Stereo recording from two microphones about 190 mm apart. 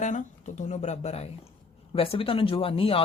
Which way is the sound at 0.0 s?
40° left (ahead or behind).